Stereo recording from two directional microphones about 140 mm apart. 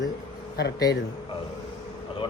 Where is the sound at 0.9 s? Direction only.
30° left (ahead or behind).